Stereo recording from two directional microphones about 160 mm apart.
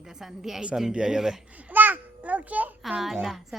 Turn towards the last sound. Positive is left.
turn(degrees=0)  # may be behind; listen again after turning